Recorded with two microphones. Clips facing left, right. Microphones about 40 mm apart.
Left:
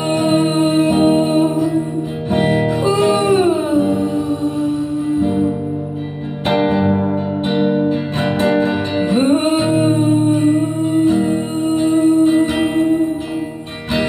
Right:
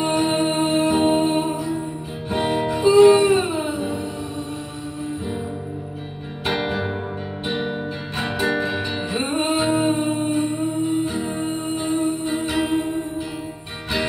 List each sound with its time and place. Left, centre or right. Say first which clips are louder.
1.0 s music: left 5 dB; left
2.3 s music: left 6 dB; left
3.0 s music: right 6 dB; centre
6.5 s music: left 10 dB; centre
9.3 s music: left 7 dB; left
11.1 s music: left 8 dB; left